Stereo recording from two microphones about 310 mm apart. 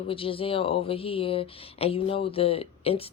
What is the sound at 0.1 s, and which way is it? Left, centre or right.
Speech, centre.